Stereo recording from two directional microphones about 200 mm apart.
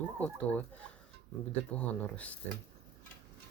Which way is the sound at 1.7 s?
5° left (ahead or behind).